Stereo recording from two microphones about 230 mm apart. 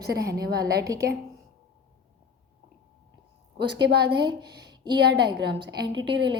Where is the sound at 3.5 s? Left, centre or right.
Right.